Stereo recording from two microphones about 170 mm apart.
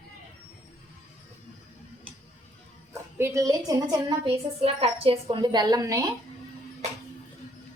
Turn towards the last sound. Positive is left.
turn(degrees=-20)  # may be behind; listen again after turning